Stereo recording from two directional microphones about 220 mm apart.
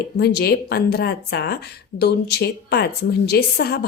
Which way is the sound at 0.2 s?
45° left (ahead or behind).